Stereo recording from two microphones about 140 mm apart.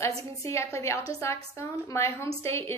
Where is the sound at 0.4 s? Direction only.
20° left (ahead or behind).